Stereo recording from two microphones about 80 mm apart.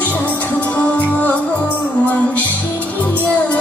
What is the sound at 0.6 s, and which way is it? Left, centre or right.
Music, centre.